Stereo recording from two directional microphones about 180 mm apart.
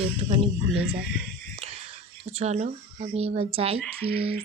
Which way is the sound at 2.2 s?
35° right (ahead or behind).